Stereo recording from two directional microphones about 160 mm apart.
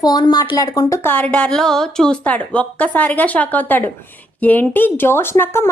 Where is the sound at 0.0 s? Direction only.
25° left (ahead or behind).